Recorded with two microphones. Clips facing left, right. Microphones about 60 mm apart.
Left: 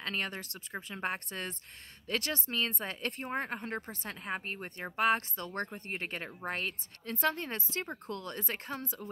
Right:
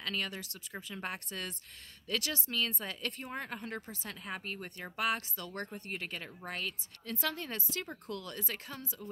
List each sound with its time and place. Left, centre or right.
0.0 s speech: left